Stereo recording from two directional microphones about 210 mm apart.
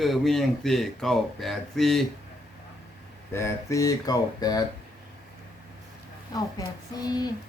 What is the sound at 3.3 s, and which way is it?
A man's voice, 15° left (ahead or behind).